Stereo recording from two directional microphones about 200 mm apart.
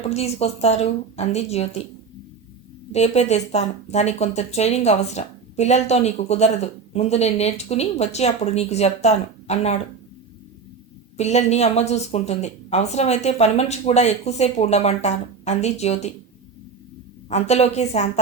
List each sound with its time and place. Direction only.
0.1 s speech: 30° left (ahead or behind)
2.9 s speech: 35° left (ahead or behind)
11.2 s speech: 35° left (ahead or behind)
17.2 s speech: 35° left (ahead or behind)